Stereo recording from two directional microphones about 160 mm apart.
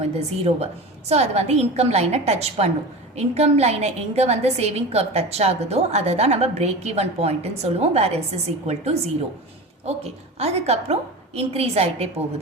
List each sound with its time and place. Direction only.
0.0 s a woman's voice: 40° right (ahead or behind)